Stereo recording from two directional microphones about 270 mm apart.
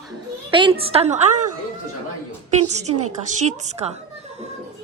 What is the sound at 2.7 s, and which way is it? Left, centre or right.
Speech, right.